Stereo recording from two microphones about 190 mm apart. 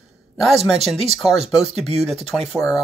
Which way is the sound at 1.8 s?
Centre (ahead or behind).